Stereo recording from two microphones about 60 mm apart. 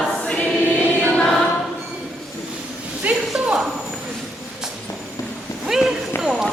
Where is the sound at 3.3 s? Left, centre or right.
Centre.